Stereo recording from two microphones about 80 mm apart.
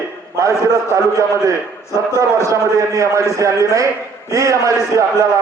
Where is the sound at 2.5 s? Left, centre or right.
Right.